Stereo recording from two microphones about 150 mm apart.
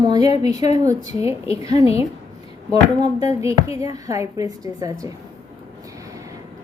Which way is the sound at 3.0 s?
25° right (ahead or behind).